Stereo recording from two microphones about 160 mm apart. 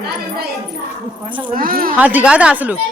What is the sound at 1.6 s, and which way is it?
Speech, 65° right (ahead or behind).